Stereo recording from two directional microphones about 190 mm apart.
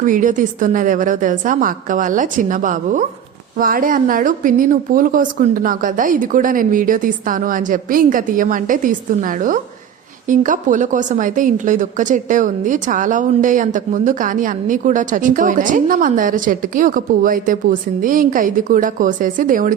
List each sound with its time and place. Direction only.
0.0 s a woman's voice: 45° right (ahead or behind)